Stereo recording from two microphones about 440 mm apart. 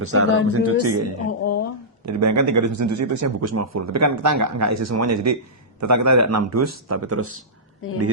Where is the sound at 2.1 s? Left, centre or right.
Right.